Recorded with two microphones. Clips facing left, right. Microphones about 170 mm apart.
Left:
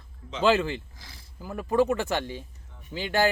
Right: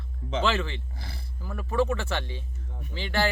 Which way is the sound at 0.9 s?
65° right (ahead or behind).